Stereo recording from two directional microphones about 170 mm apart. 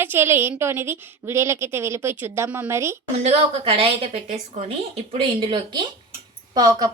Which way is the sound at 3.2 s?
35° right (ahead or behind).